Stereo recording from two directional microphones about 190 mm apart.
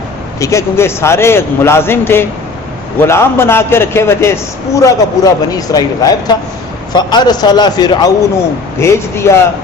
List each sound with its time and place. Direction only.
0.3 s a man's voice: 15° left (ahead or behind)